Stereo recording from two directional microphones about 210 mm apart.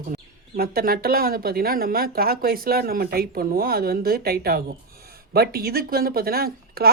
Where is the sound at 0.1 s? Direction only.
45° right (ahead or behind).